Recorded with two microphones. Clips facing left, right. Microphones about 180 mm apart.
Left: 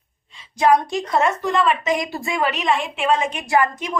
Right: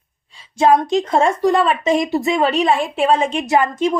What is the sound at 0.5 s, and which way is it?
A woman's voice, 25° right (ahead or behind).